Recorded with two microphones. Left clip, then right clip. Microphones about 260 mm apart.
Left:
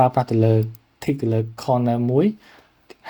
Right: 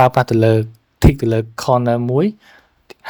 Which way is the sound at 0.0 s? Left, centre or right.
Right.